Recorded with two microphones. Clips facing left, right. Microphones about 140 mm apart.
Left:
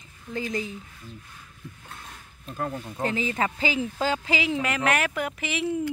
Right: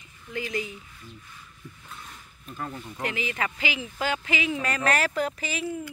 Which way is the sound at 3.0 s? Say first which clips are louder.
Left 4 dB; 35° left (ahead or behind).